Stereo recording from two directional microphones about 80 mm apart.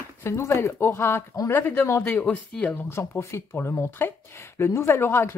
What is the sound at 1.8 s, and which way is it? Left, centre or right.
Speech, left.